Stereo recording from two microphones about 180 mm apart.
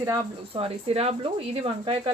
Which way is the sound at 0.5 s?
30° right (ahead or behind).